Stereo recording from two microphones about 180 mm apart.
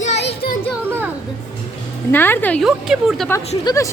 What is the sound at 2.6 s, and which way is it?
Speech, 5° right (ahead or behind).